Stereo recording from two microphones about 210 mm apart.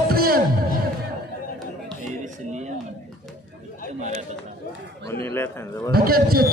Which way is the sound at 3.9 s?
35° right (ahead or behind).